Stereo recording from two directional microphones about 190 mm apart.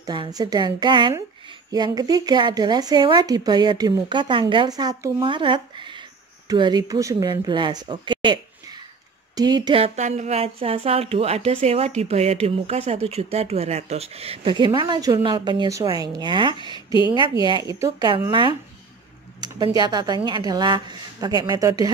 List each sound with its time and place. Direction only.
0.0 s speech: 20° right (ahead or behind)